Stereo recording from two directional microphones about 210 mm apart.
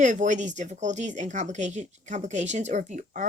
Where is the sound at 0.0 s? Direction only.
35° right (ahead or behind).